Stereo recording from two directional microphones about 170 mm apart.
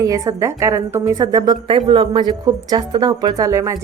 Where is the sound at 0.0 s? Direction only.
20° right (ahead or behind).